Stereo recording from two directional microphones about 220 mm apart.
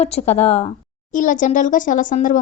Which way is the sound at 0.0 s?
30° left (ahead or behind).